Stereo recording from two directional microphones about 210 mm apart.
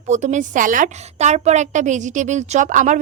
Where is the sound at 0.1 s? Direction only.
35° right (ahead or behind).